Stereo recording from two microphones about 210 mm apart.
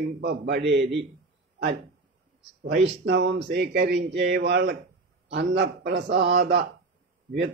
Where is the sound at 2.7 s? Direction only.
55° right (ahead or behind).